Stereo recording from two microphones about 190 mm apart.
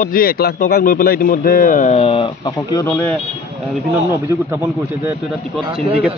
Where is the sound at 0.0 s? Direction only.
50° left (ahead or behind).